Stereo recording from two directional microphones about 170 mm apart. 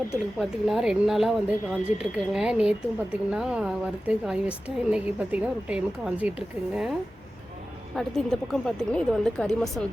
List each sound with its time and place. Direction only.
0.3 s speech: centre (ahead or behind)
7.9 s speech: 5° left (ahead or behind)